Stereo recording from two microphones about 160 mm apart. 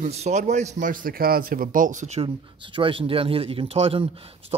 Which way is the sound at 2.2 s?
30° right (ahead or behind).